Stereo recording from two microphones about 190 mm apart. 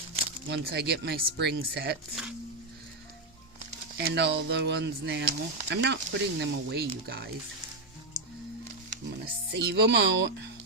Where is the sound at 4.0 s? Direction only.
60° right (ahead or behind).